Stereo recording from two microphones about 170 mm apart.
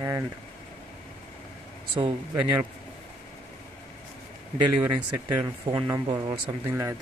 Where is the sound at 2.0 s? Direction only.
25° right (ahead or behind).